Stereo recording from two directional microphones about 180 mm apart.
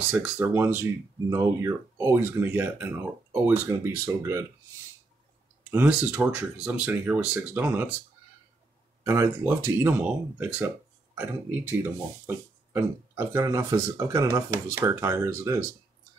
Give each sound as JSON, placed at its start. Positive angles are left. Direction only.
{"t": 0.1, "sound": "speech", "side_deg": -10}
{"t": 5.7, "sound": "speech", "side_deg": -10}
{"t": 9.0, "sound": "speech", "side_deg": -15}